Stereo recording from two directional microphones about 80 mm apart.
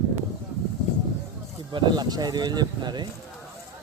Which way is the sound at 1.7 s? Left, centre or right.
Right.